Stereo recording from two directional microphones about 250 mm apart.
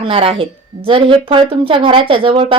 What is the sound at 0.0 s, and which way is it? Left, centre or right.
A woman's voice, right.